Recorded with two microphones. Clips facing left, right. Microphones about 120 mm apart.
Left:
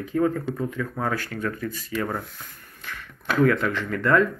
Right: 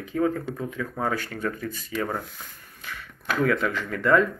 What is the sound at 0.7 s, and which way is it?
Speech, 15° right (ahead or behind).